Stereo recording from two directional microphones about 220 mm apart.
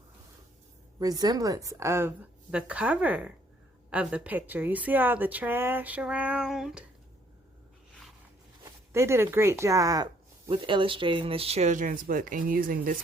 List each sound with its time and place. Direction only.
0.9 s speech: 15° right (ahead or behind); by 6.8 s centre (ahead or behind)
8.9 s speech: 10° right (ahead or behind); by 13.0 s 40° right (ahead or behind)